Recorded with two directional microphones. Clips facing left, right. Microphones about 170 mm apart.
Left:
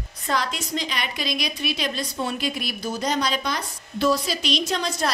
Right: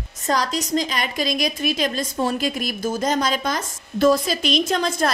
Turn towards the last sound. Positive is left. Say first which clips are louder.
# right 4 dB
turn(degrees=-50)  # may be behind; listen again after turning